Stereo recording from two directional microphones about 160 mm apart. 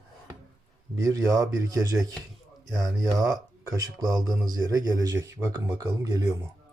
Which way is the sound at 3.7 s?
25° right (ahead or behind).